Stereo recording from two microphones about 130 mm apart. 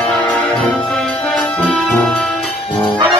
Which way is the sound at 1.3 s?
5° left (ahead or behind).